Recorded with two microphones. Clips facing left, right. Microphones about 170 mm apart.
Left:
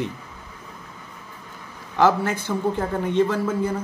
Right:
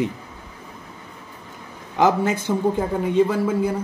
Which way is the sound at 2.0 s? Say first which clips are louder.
Right 1 dB; 15° right (ahead or behind).